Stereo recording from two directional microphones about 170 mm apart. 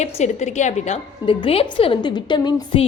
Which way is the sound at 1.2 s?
30° left (ahead or behind).